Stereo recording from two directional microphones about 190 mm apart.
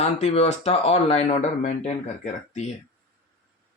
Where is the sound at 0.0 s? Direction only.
35° left (ahead or behind).